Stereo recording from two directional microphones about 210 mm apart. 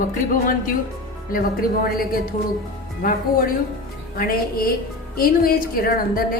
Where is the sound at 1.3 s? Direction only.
45° left (ahead or behind).